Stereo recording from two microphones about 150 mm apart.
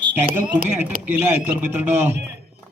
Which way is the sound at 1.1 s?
10° right (ahead or behind).